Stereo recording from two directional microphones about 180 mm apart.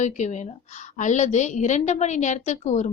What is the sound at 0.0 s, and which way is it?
A woman's voice, 40° left (ahead or behind).